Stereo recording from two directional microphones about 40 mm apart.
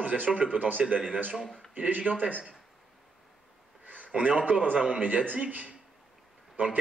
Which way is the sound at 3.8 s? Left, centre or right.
Right.